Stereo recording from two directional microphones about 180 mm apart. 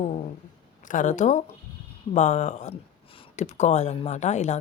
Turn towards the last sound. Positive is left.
turn(degrees=40)  # may be behind; listen again after turning